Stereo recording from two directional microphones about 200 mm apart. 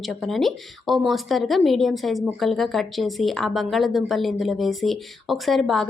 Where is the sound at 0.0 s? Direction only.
Centre (ahead or behind).